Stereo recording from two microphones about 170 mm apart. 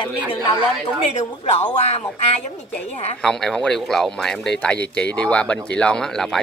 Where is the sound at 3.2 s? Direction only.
5° left (ahead or behind).